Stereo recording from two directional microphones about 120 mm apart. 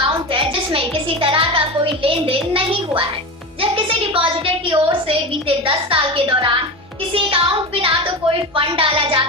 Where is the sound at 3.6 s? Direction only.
50° right (ahead or behind).